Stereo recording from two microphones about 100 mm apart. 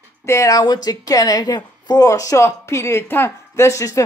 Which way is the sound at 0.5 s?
45° left (ahead or behind).